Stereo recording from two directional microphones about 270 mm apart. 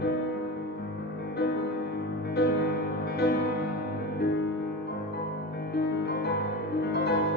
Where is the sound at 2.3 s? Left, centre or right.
Left.